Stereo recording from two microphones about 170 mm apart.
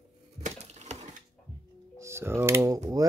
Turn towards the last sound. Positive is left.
turn(degrees=-20)  # may be behind; listen again after turning